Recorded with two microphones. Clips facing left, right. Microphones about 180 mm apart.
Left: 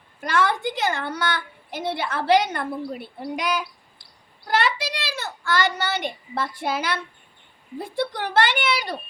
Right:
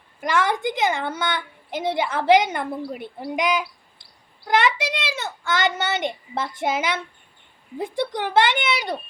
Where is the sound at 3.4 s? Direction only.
20° right (ahead or behind).